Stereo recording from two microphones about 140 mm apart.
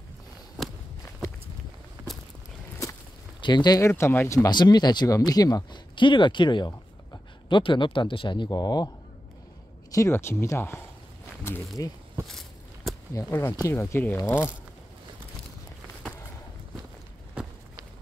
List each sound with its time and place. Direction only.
3.3 s speech: 30° left (ahead or behind)
3.9 s speech: 15° left (ahead or behind)
12.3 s a sound: centre (ahead or behind)
13.1 s speech: 20° left (ahead or behind)